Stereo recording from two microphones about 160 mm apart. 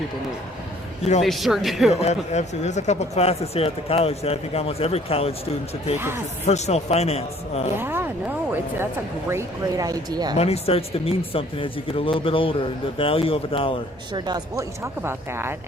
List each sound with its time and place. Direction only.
1.2 s a man's voice: centre (ahead or behind)
1.9 s speech: 45° left (ahead or behind)
6.0 s speech: 15° right (ahead or behind)
6.4 s speech: 45° left (ahead or behind)
7.8 s speech: 15° right (ahead or behind)
10.3 s speech: 40° left (ahead or behind)
14.1 s speech: 25° right (ahead or behind)
15.0 s speech: 15° right (ahead or behind)